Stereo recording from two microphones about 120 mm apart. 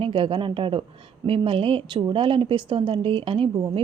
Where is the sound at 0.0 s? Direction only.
45° right (ahead or behind).